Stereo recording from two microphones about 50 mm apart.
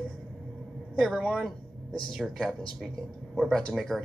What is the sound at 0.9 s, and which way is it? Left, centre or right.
Speech, centre.